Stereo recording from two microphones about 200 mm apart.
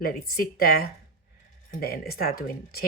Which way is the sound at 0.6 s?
50° left (ahead or behind).